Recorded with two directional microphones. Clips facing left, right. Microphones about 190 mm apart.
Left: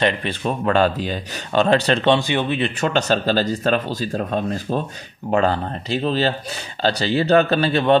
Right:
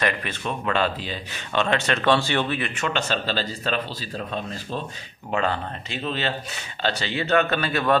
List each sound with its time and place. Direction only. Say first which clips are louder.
0.0 s speech: left 6 dB; 30° left (ahead or behind)
2.0 s speech: left 3 dB; 15° left (ahead or behind)
2.6 s speech: left 6 dB; 40° left (ahead or behind)
5.3 s speech: left 6 dB; 40° left (ahead or behind)